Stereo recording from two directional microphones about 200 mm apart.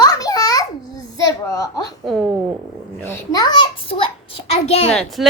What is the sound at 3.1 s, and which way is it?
Child singing, 15° left (ahead or behind).